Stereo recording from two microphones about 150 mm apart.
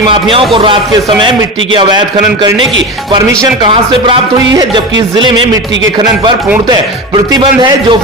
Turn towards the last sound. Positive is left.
turn(degrees=-30)  # may be behind; listen again after turning